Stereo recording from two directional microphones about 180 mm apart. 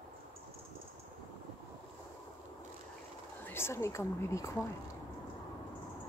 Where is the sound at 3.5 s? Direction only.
15° left (ahead or behind).